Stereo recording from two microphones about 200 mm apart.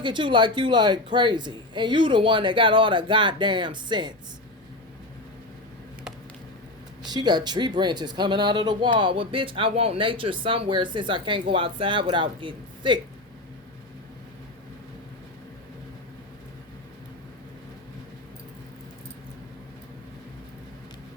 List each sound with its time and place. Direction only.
0.0 s speech: 25° right (ahead or behind)
7.0 s speech: 20° right (ahead or behind)